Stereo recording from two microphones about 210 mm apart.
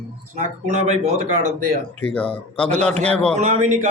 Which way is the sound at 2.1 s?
5° left (ahead or behind).